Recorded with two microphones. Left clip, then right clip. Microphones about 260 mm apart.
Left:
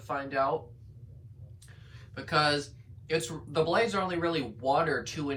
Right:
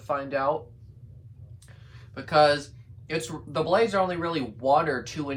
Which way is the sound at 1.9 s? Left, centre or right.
Right.